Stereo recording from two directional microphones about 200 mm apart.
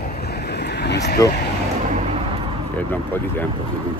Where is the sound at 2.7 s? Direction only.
10° left (ahead or behind).